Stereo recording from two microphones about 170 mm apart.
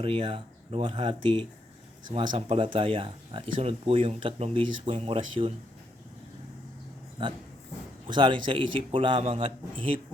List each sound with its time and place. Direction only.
0.0 s speech: 30° right (ahead or behind)
7.2 s a man's voice: 30° right (ahead or behind)